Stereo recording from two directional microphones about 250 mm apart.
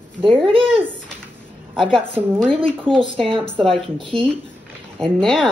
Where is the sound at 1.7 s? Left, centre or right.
Centre.